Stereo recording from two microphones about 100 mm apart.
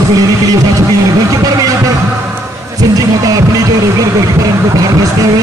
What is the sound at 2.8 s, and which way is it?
Music, 35° right (ahead or behind).